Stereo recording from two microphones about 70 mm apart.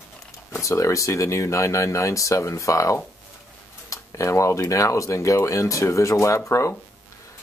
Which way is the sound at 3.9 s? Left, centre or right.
Left.